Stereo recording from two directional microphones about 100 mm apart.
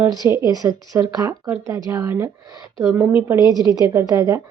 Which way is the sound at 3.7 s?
40° right (ahead or behind).